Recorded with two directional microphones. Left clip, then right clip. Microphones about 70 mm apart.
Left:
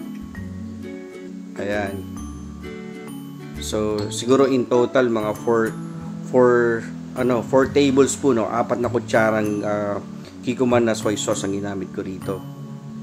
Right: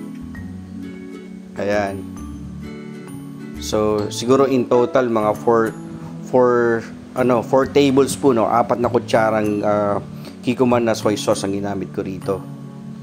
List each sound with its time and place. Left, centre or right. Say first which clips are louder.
1.6 s speech: right 5 dB; centre
3.6 s speech: right 5 dB; centre